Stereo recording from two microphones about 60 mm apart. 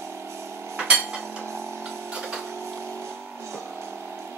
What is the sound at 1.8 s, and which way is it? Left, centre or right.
Music, centre.